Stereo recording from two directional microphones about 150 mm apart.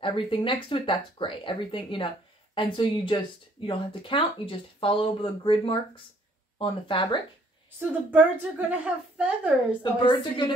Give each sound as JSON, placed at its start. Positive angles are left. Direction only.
{"t": 0.0, "sound": "speech", "side_deg": 35}
{"t": 8.1, "sound": "speech", "side_deg": -10}
{"t": 9.9, "sound": "speech", "side_deg": 30}